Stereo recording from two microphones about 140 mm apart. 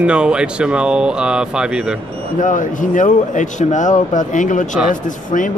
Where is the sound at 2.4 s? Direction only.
70° left (ahead or behind).